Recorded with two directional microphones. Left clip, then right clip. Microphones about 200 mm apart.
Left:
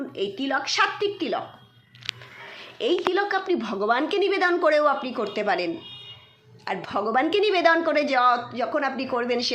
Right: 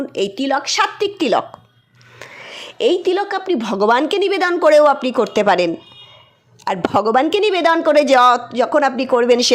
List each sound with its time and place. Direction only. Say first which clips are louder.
0.1 s a woman's voice: right 7 dB; 50° right (ahead or behind)
2.5 s a woman's voice: right 9 dB; 50° right (ahead or behind)